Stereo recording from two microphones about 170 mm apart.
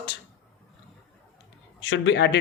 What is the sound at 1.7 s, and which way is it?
Speech, 90° left.